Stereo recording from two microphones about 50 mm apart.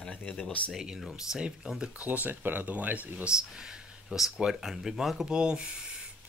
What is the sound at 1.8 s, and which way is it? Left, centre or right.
Speech, right.